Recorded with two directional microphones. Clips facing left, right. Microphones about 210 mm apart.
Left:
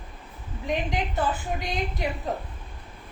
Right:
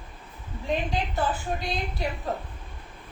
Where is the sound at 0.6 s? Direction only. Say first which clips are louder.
Even; 20° left (ahead or behind).